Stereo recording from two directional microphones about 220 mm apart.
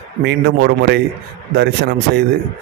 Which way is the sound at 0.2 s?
50° right (ahead or behind).